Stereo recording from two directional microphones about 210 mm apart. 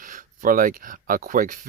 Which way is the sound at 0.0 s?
40° right (ahead or behind).